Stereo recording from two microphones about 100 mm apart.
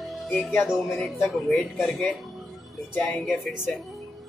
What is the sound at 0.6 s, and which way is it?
Speech, 5° right (ahead or behind).